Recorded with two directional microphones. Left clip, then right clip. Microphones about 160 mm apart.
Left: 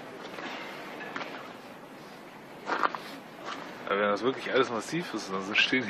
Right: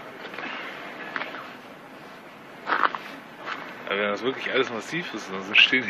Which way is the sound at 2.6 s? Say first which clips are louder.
Right 6 dB; 5° left (ahead or behind).